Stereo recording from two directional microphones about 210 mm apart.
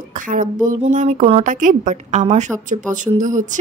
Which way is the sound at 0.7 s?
40° right (ahead or behind).